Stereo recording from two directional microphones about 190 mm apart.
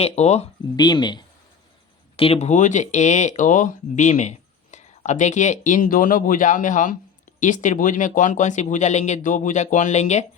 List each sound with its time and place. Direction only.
0.0 s speech: 35° left (ahead or behind)
0.8 s speech: 20° left (ahead or behind)